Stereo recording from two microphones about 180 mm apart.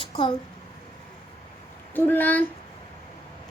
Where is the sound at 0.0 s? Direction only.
30° left (ahead or behind).